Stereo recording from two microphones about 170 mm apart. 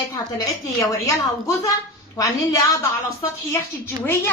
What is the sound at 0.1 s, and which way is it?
A woman's voice, 20° left (ahead or behind).